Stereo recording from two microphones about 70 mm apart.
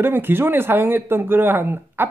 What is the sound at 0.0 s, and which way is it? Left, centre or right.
Speech, right.